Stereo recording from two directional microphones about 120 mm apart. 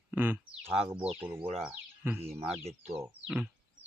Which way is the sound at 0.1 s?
15° right (ahead or behind).